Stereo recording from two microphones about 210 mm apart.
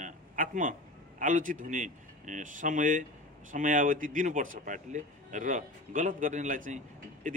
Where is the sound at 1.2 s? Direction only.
40° right (ahead or behind).